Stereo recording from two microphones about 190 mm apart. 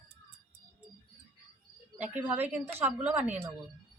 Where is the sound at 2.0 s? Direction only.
10° right (ahead or behind).